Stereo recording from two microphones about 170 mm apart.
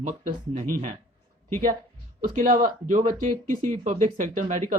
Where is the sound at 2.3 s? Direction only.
50° right (ahead or behind).